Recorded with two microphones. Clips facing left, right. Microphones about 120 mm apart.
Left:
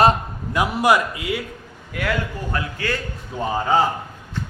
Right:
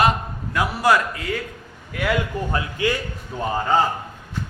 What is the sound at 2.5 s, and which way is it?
Speech, 20° right (ahead or behind).